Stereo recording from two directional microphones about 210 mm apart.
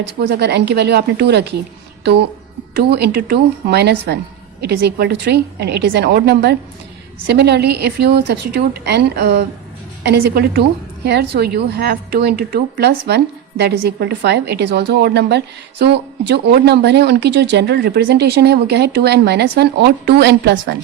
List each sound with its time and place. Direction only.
0.2 s a woman's voice: 50° right (ahead or behind)
2.7 s a woman's voice: 50° right (ahead or behind)